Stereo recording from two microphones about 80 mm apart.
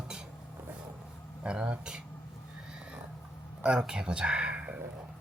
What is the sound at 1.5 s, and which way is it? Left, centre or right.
Speech, centre.